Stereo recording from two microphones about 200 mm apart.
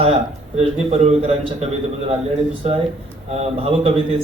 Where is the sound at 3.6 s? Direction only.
30° right (ahead or behind).